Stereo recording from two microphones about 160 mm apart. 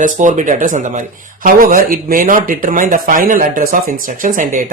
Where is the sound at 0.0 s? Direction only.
50° right (ahead or behind).